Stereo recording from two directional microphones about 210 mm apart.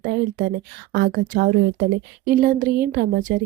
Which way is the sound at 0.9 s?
45° right (ahead or behind).